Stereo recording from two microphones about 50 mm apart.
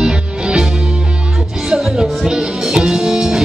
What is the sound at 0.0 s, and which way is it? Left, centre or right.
Music, centre.